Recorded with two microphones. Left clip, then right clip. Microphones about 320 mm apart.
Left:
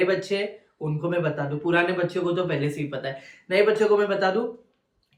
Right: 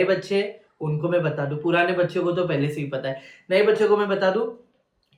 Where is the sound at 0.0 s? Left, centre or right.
Centre.